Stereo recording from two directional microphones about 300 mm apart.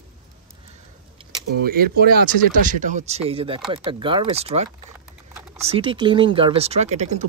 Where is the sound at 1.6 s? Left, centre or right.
Right.